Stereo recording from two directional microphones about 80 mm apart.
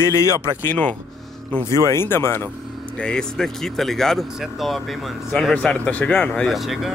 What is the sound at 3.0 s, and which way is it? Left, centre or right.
Speech, centre.